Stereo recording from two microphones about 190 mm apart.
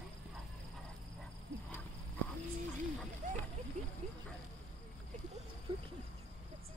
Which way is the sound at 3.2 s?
40° right (ahead or behind).